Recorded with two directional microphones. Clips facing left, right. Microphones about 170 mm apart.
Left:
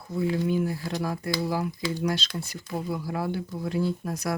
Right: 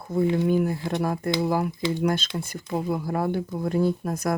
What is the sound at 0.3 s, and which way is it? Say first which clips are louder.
Speech: right 4 dB; 50° right (ahead or behind).